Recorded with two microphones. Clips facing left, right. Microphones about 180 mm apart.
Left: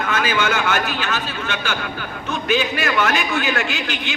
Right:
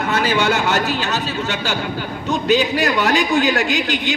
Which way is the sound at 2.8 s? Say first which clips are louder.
Right 3 dB; 35° right (ahead or behind).